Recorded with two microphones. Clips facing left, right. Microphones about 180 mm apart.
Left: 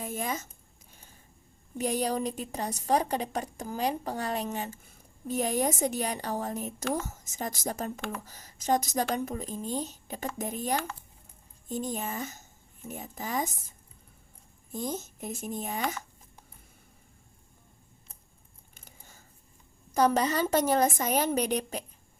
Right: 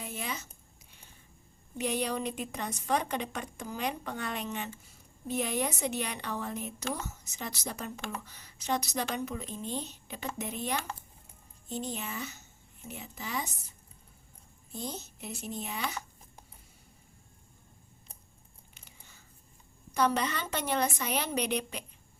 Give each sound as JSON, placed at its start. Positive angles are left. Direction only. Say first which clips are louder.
{"t": 0.0, "sound": "a sound", "louder": "left 5 dB", "side_deg": 45}
{"t": 1.8, "sound": "a woman's voice", "louder": "left 3 dB", "side_deg": 40}
{"t": 14.7, "sound": "a woman's voice", "louder": "left 5 dB", "side_deg": 45}
{"t": 18.7, "sound": "biting", "louder": "left 4 dB", "side_deg": 45}
{"t": 19.9, "sound": "a woman's voice", "louder": "left 4 dB", "side_deg": 40}